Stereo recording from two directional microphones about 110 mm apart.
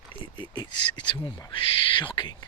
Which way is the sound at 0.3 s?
45° left (ahead or behind).